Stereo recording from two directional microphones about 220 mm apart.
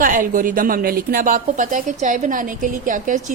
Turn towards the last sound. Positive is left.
turn(degrees=-35)  # may be behind; listen again after turning